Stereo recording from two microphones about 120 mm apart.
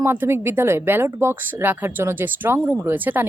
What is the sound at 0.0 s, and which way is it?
Speech, 20° right (ahead or behind).